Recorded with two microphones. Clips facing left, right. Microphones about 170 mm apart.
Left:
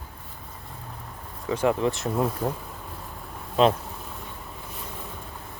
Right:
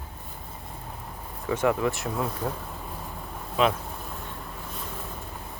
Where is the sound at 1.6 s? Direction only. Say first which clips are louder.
Left 1 dB; 25° left (ahead or behind).